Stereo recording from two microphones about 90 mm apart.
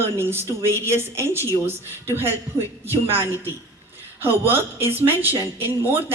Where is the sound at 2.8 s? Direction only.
25° right (ahead or behind).